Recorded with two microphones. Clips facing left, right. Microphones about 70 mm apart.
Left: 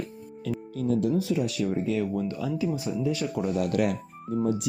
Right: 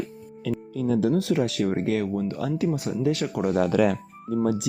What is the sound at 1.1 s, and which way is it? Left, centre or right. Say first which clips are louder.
Speech: right 3 dB; right.